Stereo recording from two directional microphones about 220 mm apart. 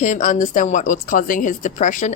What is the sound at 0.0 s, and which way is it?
A woman's voice, 35° left (ahead or behind).